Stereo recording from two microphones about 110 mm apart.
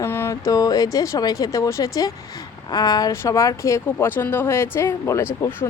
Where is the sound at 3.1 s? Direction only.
25° left (ahead or behind).